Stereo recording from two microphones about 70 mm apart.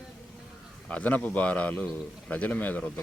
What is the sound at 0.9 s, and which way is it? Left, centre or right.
Speech, left.